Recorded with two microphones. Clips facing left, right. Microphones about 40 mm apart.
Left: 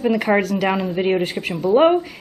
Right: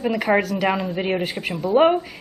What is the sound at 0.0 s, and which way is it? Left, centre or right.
Speech, centre.